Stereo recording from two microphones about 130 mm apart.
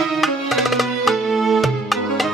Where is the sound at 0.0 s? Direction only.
Centre (ahead or behind).